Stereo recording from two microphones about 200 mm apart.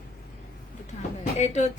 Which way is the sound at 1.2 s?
35° left (ahead or behind).